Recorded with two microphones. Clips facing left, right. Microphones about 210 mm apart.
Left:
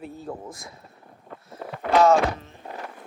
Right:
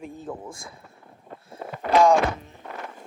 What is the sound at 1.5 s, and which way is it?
Vehicle, 25° right (ahead or behind).